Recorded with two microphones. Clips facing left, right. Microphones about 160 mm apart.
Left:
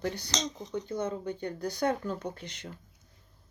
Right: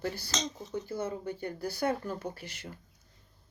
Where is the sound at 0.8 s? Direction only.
5° right (ahead or behind).